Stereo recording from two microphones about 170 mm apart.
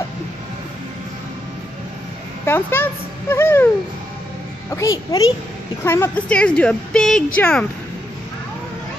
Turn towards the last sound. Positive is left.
turn(degrees=5)  # may be behind; listen again after turning